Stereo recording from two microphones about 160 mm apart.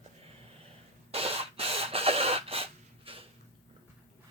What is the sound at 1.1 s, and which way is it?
Printer, 35° right (ahead or behind).